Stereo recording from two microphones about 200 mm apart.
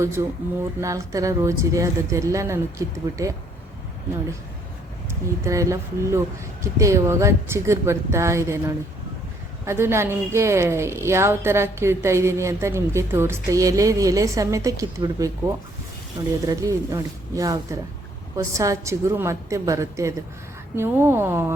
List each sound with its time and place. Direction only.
0.2 s a woman's voice: 15° right (ahead or behind)
5.5 s a woman's voice: 15° right (ahead or behind)